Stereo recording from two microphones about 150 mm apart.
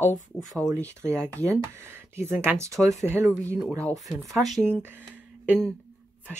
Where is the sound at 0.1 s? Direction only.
55° left (ahead or behind).